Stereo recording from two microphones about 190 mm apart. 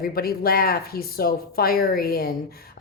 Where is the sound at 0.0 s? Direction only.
50° left (ahead or behind).